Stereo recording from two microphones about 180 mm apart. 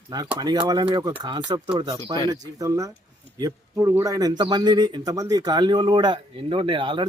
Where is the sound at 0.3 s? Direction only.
20° right (ahead or behind).